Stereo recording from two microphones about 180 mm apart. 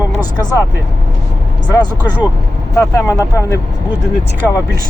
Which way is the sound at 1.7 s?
20° left (ahead or behind).